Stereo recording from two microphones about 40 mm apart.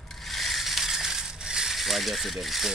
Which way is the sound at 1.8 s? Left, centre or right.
Centre.